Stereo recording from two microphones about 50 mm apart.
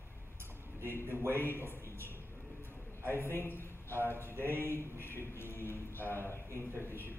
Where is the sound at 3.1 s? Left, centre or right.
Left.